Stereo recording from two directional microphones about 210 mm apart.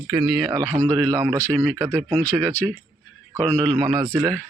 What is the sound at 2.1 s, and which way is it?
Speech, 10° left (ahead or behind).